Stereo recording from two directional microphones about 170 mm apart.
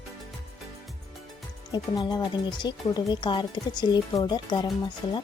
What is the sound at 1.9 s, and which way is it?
Speech, 25° left (ahead or behind).